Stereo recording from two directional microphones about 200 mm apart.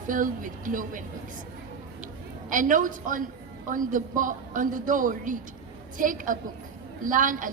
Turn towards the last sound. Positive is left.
turn(degrees=-40)  # may be behind; listen again after turning